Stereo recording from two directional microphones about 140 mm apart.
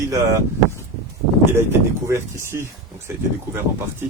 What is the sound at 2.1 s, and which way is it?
Speech, 20° right (ahead or behind).